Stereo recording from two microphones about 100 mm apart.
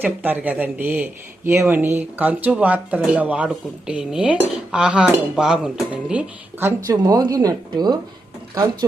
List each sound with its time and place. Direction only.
0.0 s speech: 20° right (ahead or behind)
6.6 s speech: 25° right (ahead or behind)
6.9 s speech: 40° right (ahead or behind)